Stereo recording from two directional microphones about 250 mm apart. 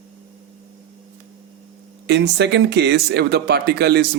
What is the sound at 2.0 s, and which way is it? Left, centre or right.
Speech, right.